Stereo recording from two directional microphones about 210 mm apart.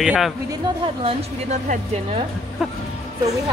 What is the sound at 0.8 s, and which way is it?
A woman's voice, 30° right (ahead or behind).